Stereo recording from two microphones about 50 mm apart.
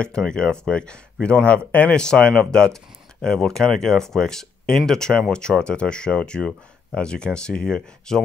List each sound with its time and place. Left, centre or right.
0.0 s speech: centre
2.0 s speech: centre